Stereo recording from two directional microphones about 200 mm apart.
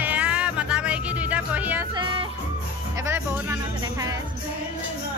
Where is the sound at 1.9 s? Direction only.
25° right (ahead or behind).